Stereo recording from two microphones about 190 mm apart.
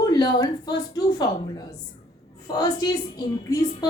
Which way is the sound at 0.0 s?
20° left (ahead or behind).